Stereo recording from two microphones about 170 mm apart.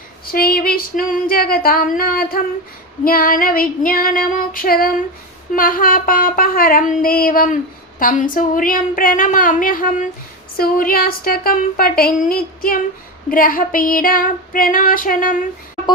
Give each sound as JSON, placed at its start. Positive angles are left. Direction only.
{"t": 0.3, "sound": "child singing", "side_deg": 60}